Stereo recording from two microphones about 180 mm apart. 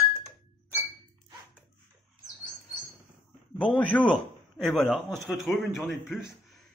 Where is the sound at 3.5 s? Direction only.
10° left (ahead or behind).